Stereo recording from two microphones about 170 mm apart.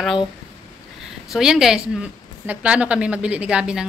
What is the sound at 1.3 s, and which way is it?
A woman's voice, centre (ahead or behind).